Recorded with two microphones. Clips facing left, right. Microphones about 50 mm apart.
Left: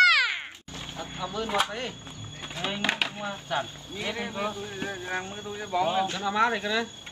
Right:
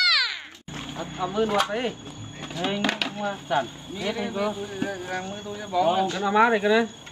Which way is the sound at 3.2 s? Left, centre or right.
Centre.